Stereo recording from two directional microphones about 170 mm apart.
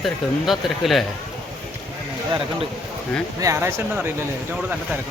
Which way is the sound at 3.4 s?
15° right (ahead or behind).